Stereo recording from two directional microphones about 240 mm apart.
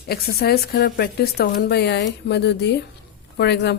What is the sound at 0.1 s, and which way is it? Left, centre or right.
A woman's voice, left.